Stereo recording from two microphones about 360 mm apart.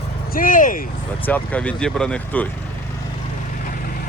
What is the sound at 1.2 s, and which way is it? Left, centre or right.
Speech, centre.